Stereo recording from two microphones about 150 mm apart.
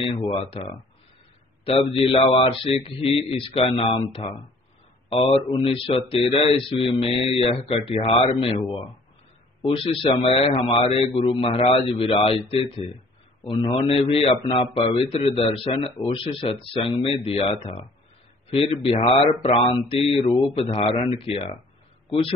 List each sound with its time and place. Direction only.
0.0 s speech: 40° left (ahead or behind)
1.6 s speech: 40° left (ahead or behind)